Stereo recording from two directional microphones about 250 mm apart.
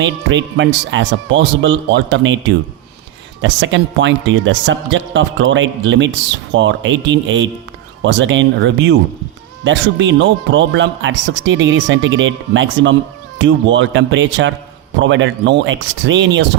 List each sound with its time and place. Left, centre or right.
0.0 s speech: right
3.4 s speech: right